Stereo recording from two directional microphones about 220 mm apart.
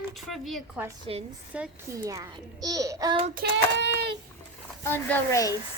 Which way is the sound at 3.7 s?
50° right (ahead or behind).